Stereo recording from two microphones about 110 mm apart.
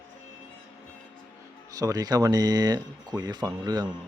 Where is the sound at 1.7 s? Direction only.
35° right (ahead or behind).